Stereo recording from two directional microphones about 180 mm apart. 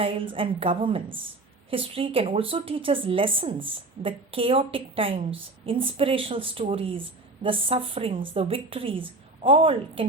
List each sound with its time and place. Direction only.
0.0 s a woman's voice: 30° right (ahead or behind)